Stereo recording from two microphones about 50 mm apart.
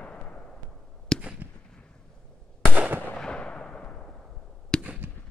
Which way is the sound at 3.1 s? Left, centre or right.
Centre.